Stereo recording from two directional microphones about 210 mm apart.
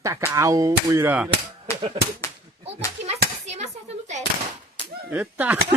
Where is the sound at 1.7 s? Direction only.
15° left (ahead or behind).